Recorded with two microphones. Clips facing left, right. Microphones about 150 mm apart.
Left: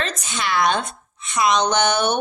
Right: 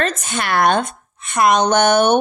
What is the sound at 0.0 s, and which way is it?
A woman's voice, 50° right (ahead or behind).